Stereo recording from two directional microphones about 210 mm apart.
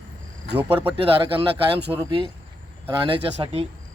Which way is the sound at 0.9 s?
25° right (ahead or behind).